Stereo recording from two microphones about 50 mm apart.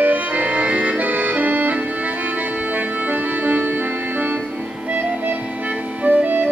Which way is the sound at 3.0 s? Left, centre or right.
Right.